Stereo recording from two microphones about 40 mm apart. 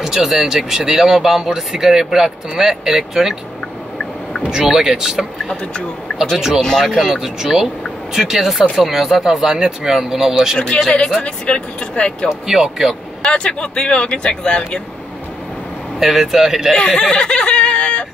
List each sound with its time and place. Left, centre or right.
0.0 s speech: centre
4.5 s speech: centre
6.1 s a sound: left
6.6 s speech: centre
6.9 s speech: centre
11.1 s speech: left
12.3 s speech: centre
13.2 s speech: left
16.0 s speech: centre
16.8 s speech: centre